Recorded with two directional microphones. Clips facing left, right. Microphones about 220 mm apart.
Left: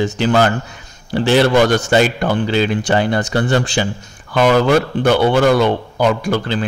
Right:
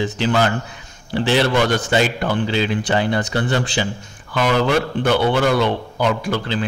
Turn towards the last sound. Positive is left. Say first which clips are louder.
# left 3 dB
turn(degrees=45)  # may be behind; listen again after turning